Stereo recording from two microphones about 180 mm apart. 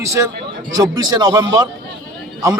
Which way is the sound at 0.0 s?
15° right (ahead or behind).